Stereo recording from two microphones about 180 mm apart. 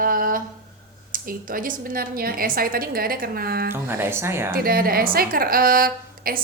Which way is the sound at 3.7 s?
10° right (ahead or behind).